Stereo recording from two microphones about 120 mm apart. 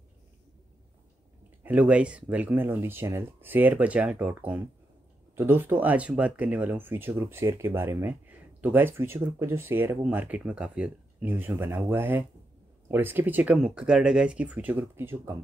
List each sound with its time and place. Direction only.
1.6 s speech: 10° right (ahead or behind)